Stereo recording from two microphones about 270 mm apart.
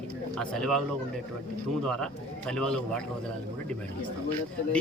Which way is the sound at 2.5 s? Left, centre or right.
Centre.